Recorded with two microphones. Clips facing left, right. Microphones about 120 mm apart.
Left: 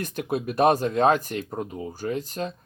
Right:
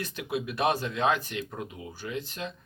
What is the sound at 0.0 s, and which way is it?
Speech, 45° left (ahead or behind).